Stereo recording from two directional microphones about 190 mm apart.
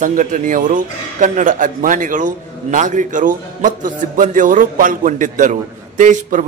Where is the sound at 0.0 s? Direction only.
40° right (ahead or behind).